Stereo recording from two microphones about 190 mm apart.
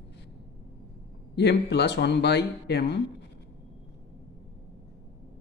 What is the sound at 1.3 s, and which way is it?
Speech, 60° left (ahead or behind).